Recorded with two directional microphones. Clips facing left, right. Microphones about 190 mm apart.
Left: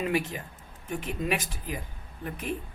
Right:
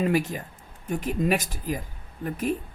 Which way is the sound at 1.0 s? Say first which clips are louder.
Right 6 dB; 40° right (ahead or behind).